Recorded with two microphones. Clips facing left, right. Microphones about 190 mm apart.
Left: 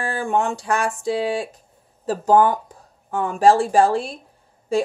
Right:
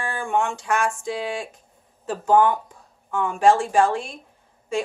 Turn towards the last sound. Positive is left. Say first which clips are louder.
# left 5 dB
turn(degrees=35)  # may be behind; listen again after turning